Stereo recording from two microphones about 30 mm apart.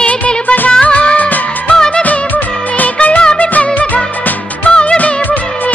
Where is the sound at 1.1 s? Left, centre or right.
Left.